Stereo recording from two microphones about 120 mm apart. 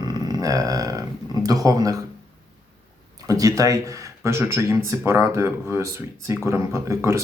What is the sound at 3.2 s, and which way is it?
Speech, 30° right (ahead or behind).